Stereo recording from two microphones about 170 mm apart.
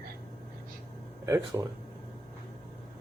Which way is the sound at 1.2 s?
15° right (ahead or behind).